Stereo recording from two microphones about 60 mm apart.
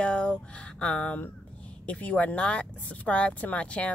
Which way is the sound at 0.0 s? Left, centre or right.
Centre.